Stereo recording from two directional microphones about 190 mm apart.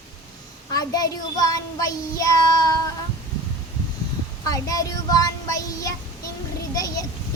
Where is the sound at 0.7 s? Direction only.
20° left (ahead or behind).